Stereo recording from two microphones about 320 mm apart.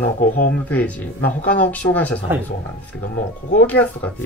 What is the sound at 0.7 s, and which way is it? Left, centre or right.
Speech, centre.